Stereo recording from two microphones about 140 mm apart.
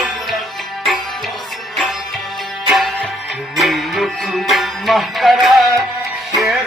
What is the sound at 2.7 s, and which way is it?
Music, centre (ahead or behind).